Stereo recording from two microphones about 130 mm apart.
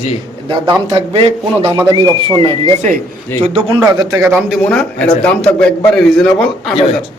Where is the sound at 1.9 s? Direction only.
35° right (ahead or behind).